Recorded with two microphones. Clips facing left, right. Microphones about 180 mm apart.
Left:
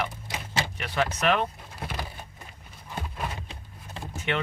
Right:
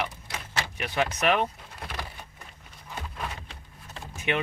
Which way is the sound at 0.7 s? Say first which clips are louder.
Right 2 dB; 15° right (ahead or behind).